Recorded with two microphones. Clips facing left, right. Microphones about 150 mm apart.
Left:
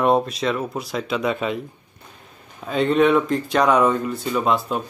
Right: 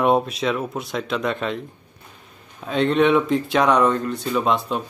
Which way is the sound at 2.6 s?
Centre (ahead or behind).